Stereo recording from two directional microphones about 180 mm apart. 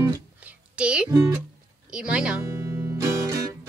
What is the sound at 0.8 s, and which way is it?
Speech, 5° right (ahead or behind).